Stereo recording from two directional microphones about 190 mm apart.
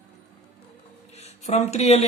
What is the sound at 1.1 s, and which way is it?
Speech, 35° left (ahead or behind).